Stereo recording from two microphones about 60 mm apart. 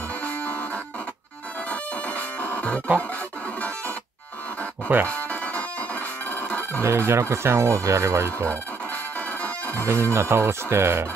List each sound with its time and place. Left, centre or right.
1.7 s music: left
5.0 s music: left
6.8 s speech: right
9.4 s music: left
9.8 s speech: right